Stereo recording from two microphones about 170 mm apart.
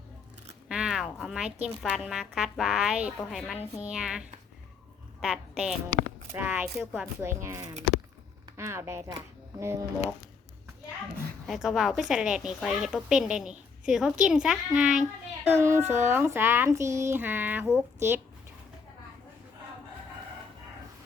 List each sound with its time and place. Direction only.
0.7 s a woman's voice: 5° right (ahead or behind)
7.2 s speech: 15° right (ahead or behind)
11.4 s a woman's voice: centre (ahead or behind)